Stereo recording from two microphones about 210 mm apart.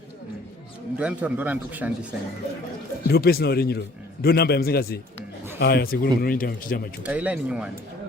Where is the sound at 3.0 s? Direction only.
50° left (ahead or behind).